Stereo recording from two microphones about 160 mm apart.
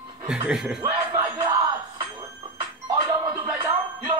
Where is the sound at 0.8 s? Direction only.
20° right (ahead or behind).